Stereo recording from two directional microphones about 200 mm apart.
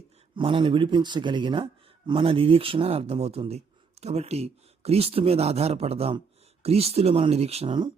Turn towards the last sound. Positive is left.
turn(degrees=-25)  # may be behind; listen again after turning